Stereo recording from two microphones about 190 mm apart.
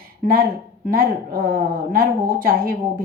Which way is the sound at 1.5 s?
50° right (ahead or behind).